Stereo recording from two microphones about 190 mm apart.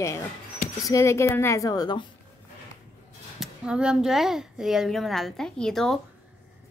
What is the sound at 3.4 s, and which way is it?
A woman's voice, 5° right (ahead or behind).